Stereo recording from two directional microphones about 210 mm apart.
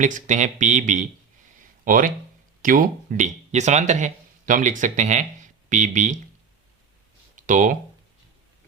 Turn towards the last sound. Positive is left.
turn(degrees=-40)  # may be behind; listen again after turning